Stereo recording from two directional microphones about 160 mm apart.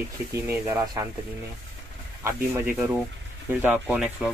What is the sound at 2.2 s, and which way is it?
Speech, 15° right (ahead or behind).